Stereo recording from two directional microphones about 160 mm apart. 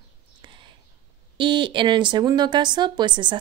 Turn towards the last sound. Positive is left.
turn(degrees=-30)  # may be behind; listen again after turning